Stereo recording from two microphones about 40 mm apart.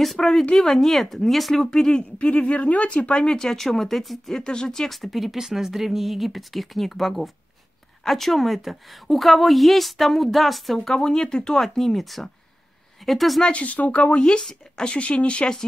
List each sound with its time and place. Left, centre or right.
0.0 s speech: centre
2.1 s speech: left
3.3 s speech: centre
4.4 s speech: centre
4.8 s a woman's voice: centre
11.6 s a woman's voice: centre
13.4 s speech: left